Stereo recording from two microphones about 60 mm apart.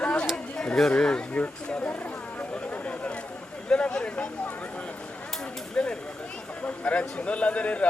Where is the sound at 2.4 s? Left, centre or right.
Left.